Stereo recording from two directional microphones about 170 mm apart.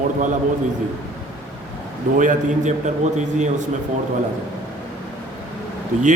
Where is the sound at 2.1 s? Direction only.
45° right (ahead or behind).